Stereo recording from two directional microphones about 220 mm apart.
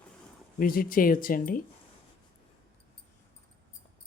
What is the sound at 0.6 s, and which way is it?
Speech, 40° left (ahead or behind).